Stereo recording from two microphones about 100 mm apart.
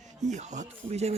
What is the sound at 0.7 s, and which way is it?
Speech, 90° right.